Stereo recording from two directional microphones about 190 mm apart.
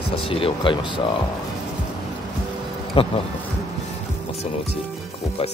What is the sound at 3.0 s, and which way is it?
Speech, 30° left (ahead or behind).